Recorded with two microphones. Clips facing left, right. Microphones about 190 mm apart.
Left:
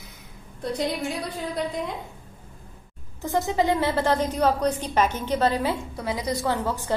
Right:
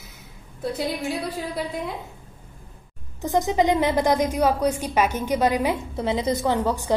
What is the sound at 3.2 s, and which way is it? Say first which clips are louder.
A woman's voice: right 3 dB; 15° right (ahead or behind).